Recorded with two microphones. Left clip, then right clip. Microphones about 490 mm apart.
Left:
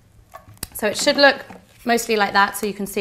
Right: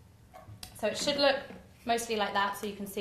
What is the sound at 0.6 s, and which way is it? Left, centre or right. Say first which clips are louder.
A woman's voice: left 12 dB; left.